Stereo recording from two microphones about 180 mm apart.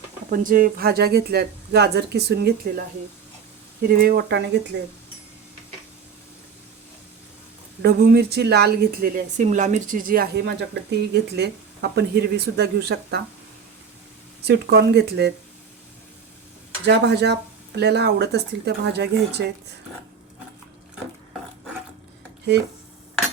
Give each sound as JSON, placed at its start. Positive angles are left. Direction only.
{"t": 0.3, "sound": "speech", "side_deg": -50}
{"t": 3.8, "sound": "speech", "side_deg": -55}
{"t": 7.8, "sound": "speech", "side_deg": -60}
{"t": 14.4, "sound": "speech", "side_deg": -65}
{"t": 16.8, "sound": "speech", "side_deg": -70}